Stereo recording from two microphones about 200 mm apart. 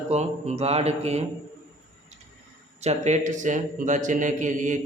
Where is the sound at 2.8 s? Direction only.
35° right (ahead or behind).